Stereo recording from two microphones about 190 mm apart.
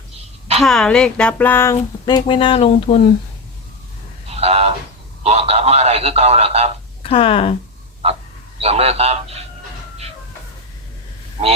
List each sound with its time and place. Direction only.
0.2 s a sound: 35° right (ahead or behind)
0.6 s speech: centre (ahead or behind); by 3.0 s 30° left (ahead or behind)
4.3 s a sound: 35° right (ahead or behind)
5.2 s a man's voice: 35° right (ahead or behind)
7.0 s speech: 30° left (ahead or behind)
8.6 s a man's voice: 30° right (ahead or behind)
11.4 s speech: 30° right (ahead or behind)